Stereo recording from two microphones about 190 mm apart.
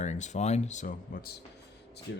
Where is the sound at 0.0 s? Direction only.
40° left (ahead or behind).